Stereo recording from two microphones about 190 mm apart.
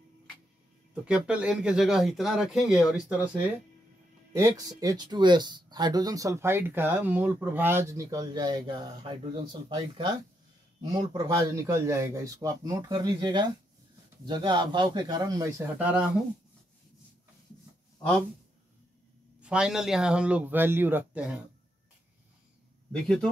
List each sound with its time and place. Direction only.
1.0 s speech: 5° right (ahead or behind)
19.4 s a man's voice: 5° right (ahead or behind)